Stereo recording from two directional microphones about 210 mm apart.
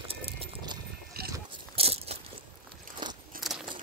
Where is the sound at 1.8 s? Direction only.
30° right (ahead or behind).